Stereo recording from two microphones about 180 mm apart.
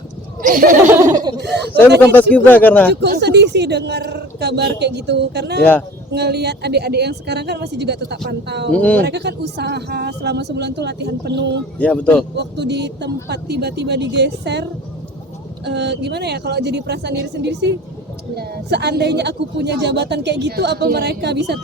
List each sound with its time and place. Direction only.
0.4 s speech: 50° right (ahead or behind)
1.1 s speech: 25° right (ahead or behind)
1.4 s speech: 65° right (ahead or behind)
2.3 s speech: 10° left (ahead or behind)
2.9 s speech: 70° right (ahead or behind)
8.7 s speech: 5° left (ahead or behind)
9.0 s speech: 70° right (ahead or behind)
11.8 s speech: 5° left (ahead or behind)
12.4 s speech: 70° right (ahead or behind)